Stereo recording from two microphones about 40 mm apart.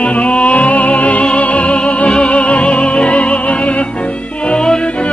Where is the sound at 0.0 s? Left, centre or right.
Left.